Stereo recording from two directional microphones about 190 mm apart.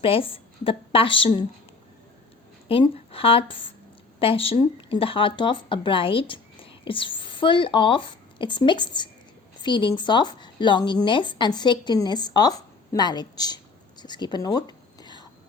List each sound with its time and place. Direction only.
0.0 s speech: 30° left (ahead or behind)
2.6 s speech: 30° left (ahead or behind)
14.0 s whispering: 25° left (ahead or behind)